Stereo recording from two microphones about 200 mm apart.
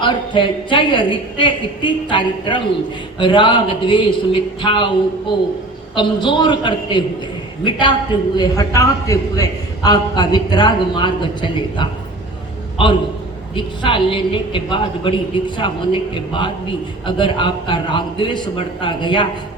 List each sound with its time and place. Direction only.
0.0 s a woman's voice: 25° left (ahead or behind)
13.6 s a woman's voice: 25° left (ahead or behind)